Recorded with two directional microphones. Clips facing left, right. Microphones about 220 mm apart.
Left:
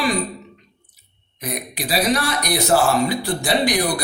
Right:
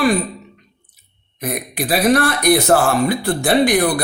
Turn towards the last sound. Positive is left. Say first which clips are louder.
# right 5 dB
turn(degrees=-55)  # may be behind; listen again after turning